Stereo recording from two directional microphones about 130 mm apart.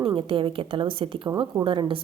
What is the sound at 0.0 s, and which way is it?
A woman's voice, 45° right (ahead or behind).